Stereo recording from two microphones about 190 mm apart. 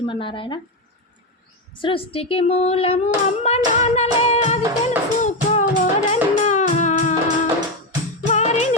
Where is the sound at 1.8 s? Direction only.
30° left (ahead or behind).